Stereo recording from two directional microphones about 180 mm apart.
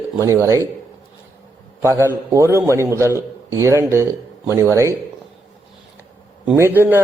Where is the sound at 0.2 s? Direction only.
15° right (ahead or behind).